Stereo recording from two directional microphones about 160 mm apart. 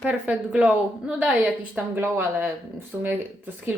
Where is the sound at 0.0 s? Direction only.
10° right (ahead or behind).